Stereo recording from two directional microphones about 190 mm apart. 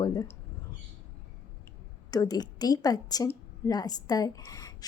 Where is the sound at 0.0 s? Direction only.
20° left (ahead or behind).